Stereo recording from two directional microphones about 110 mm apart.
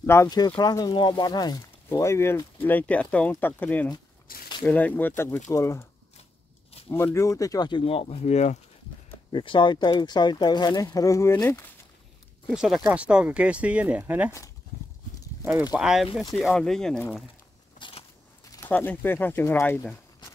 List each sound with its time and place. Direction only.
0.0 s speech: 25° left (ahead or behind)
0.6 s speech: 35° left (ahead or behind)
1.9 s speech: 25° left (ahead or behind)
6.9 s speech: 20° left (ahead or behind); by 7.8 s 40° left (ahead or behind)
7.8 s speech: 60° left (ahead or behind); by 8.5 s 90° left
9.3 s speech: 50° left (ahead or behind); by 11.6 s 25° left (ahead or behind)
12.4 s speech: centre (ahead or behind)
12.8 s speech: 10° right (ahead or behind)
15.7 s speech: 5° right (ahead or behind)
16.3 s speech: 5° left (ahead or behind)
17.7 s a sound: 45° left (ahead or behind)
18.7 s speech: 15° left (ahead or behind)